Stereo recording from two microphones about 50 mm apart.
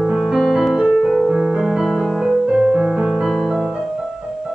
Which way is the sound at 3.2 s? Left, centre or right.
Centre.